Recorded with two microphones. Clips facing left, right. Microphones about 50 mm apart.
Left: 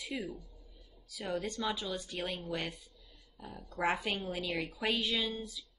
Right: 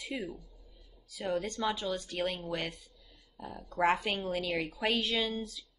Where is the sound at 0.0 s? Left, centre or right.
Right.